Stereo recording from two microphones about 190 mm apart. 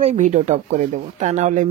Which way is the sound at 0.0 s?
35° right (ahead or behind).